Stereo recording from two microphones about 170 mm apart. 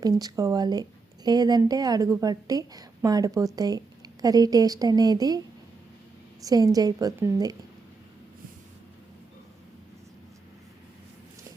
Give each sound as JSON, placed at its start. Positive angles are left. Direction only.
{"t": 0.0, "sound": "speech", "side_deg": -20}
{"t": 6.4, "sound": "speech", "side_deg": -20}